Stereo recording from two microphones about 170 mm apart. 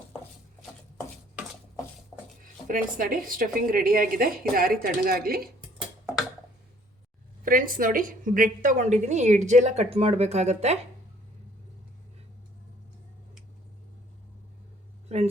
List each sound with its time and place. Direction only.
2.6 s a woman's voice: 55° right (ahead or behind)
7.4 s a woman's voice: 55° right (ahead or behind)